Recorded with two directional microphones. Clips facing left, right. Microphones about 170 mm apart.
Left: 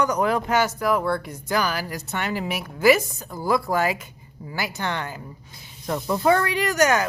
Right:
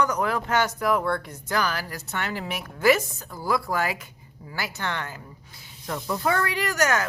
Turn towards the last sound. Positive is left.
turn(degrees=15)  # may be behind; listen again after turning